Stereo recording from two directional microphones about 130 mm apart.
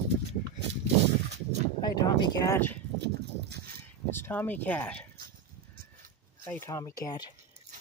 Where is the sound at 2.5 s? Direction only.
15° left (ahead or behind).